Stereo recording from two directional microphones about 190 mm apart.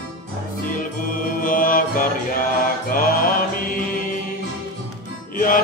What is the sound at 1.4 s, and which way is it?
Music, 45° left (ahead or behind).